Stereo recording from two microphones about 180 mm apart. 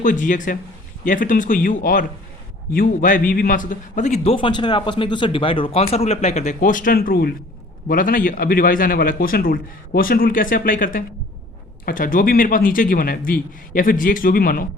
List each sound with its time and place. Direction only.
0.0 s a man's voice: 45° left (ahead or behind)